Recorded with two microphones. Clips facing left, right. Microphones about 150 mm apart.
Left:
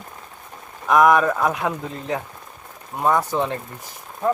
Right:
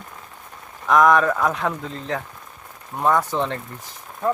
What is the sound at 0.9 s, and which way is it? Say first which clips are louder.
Speech: left 1 dB; 10° left (ahead or behind).